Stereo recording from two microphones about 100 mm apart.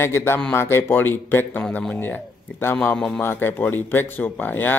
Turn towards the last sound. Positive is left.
turn(degrees=20)  # may be behind; listen again after turning